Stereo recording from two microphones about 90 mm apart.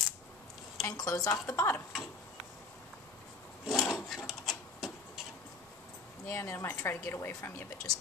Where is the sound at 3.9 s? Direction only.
Centre (ahead or behind).